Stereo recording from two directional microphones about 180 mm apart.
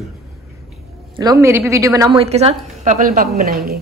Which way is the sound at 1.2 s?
20° right (ahead or behind).